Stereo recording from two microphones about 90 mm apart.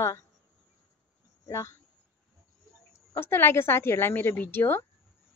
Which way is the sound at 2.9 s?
25° left (ahead or behind).